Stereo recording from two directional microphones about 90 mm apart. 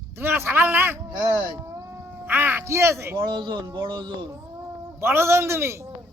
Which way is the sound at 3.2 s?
60° right (ahead or behind).